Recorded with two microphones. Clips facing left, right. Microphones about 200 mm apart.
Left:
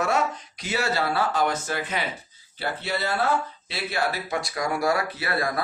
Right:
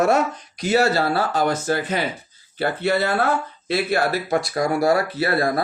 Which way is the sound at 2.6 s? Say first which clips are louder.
Right 8 dB; 55° right (ahead or behind).